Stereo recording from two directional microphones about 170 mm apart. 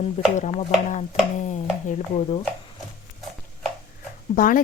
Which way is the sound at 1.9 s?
35° left (ahead or behind).